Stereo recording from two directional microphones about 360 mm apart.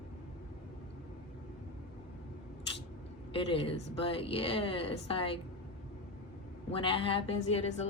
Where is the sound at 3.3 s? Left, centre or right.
Centre.